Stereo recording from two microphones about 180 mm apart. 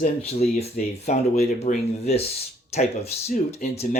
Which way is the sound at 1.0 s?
40° left (ahead or behind).